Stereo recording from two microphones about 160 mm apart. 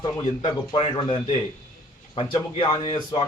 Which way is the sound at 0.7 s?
35° left (ahead or behind).